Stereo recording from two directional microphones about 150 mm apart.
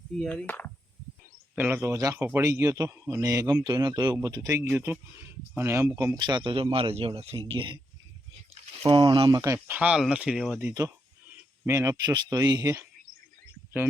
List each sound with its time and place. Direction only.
0.2 s speech: 10° left (ahead or behind)
1.5 s a man's voice: 15° right (ahead or behind)
6.1 s speech: 30° right (ahead or behind)
8.8 s a man's voice: 30° right (ahead or behind)
9.7 s speech: 5° right (ahead or behind)
11.6 s a man's voice: 20° right (ahead or behind)